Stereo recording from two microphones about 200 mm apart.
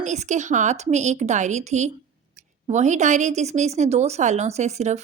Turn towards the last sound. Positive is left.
turn(degrees=-35)  # may be behind; listen again after turning